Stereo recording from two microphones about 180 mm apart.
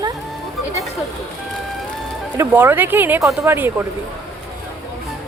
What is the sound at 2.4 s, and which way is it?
Speech, 10° right (ahead or behind).